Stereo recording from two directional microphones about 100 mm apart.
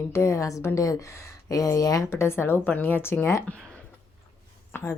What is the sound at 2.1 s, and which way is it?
Speech, 25° left (ahead or behind).